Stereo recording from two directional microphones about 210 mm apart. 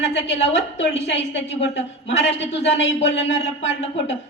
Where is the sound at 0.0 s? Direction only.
55° left (ahead or behind).